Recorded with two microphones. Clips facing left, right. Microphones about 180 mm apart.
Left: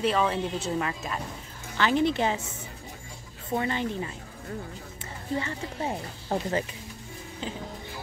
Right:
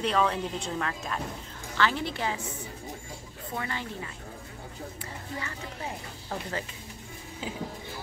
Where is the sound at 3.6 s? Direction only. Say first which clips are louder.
Left 7 dB; 25° left (ahead or behind).